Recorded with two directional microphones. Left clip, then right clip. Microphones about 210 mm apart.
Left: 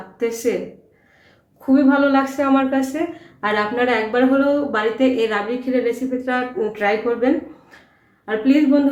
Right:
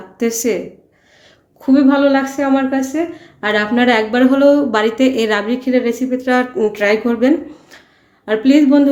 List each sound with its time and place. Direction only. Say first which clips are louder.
0.2 s speech: right 3 dB; 55° right (ahead or behind)
1.6 s a woman's voice: right 4 dB; 45° right (ahead or behind)
3.4 s speech: right 4 dB; 45° right (ahead or behind)